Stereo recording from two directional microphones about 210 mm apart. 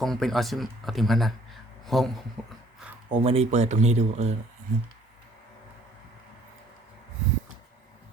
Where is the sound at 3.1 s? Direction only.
30° right (ahead or behind).